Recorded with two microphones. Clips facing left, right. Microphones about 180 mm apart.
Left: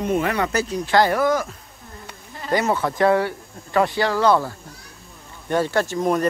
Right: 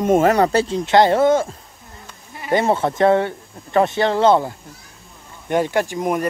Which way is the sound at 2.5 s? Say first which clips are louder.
Right 3 dB; 25° right (ahead or behind).